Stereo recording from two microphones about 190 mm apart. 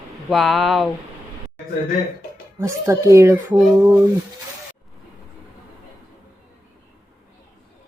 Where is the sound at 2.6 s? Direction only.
15° right (ahead or behind).